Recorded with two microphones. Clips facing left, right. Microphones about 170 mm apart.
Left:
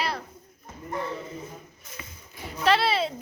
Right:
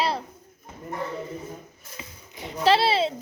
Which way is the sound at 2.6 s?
30° right (ahead or behind).